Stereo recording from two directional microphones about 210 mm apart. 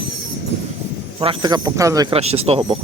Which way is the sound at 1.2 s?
20° right (ahead or behind).